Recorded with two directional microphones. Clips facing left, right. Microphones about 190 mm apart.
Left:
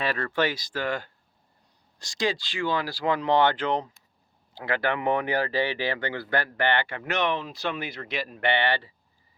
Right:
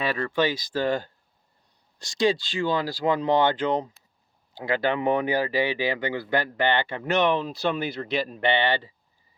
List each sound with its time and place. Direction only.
0.0 s speech: 15° right (ahead or behind)
0.8 s speech: 30° right (ahead or behind)
7.0 s speech: 35° right (ahead or behind)